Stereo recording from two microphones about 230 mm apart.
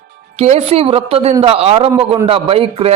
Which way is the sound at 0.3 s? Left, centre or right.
Right.